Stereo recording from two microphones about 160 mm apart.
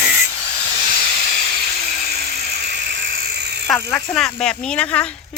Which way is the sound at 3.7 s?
5° left (ahead or behind).